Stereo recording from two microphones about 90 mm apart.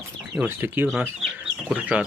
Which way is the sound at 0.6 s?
25° right (ahead or behind).